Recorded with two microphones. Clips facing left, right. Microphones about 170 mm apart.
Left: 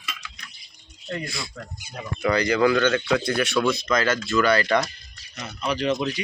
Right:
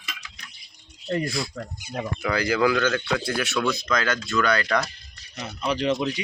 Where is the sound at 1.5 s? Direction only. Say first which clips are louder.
Right 5 dB; 40° right (ahead or behind).